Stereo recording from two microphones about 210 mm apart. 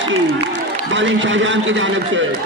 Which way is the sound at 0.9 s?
60° right (ahead or behind).